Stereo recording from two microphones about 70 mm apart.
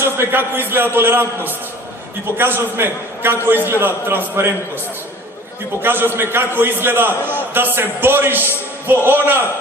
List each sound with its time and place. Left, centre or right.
0.0 s a man's voice: right
2.4 s a man's voice: right
5.8 s a man's voice: right